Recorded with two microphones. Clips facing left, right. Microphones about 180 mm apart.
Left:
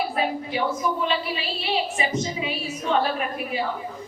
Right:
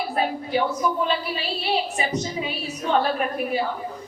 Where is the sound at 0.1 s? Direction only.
40° right (ahead or behind).